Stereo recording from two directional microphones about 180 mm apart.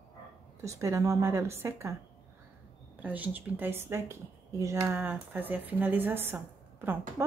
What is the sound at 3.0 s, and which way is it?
Speech, 10° right (ahead or behind).